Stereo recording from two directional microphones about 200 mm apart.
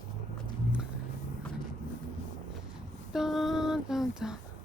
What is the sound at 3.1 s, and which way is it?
Female singing, centre (ahead or behind).